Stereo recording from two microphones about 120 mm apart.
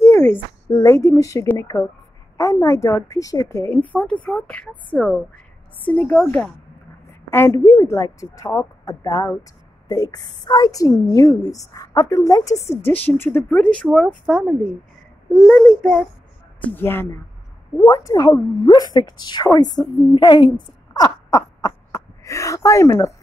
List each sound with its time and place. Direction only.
0.0 s a sound: 20° left (ahead or behind)
0.7 s a woman's voice: 25° left (ahead or behind)
3.9 s a woman's voice: 10° left (ahead or behind)
7.2 s a woman's voice: 20° left (ahead or behind)
12.6 s a woman's voice: 15° left (ahead or behind)
15.3 s speech: 5° left (ahead or behind)
16.6 s a woman's voice: 15° left (ahead or behind)
17.7 s a woman's voice: 30° left (ahead or behind)
20.6 s a sound: 30° left (ahead or behind)